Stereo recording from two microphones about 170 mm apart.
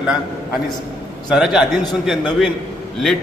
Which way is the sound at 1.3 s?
5° right (ahead or behind).